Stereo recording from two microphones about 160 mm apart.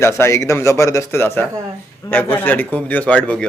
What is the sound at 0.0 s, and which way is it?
A man's voice, 20° left (ahead or behind).